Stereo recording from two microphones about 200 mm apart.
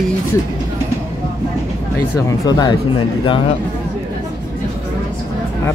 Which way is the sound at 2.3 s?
20° left (ahead or behind).